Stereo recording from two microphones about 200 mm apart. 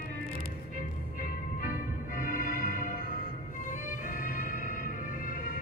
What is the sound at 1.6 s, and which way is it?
Music, 45° left (ahead or behind).